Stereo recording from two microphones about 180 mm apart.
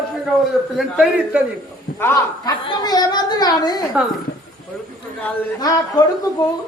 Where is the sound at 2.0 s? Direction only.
15° left (ahead or behind).